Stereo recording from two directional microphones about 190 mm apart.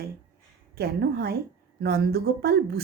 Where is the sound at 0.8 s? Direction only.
55° right (ahead or behind).